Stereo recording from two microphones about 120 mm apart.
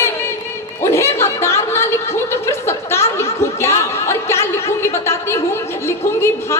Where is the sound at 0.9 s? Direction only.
20° left (ahead or behind).